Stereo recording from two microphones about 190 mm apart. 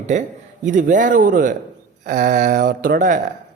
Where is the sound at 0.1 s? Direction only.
40° right (ahead or behind).